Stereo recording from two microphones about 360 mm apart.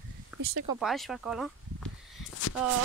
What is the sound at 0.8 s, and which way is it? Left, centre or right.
Speech, centre.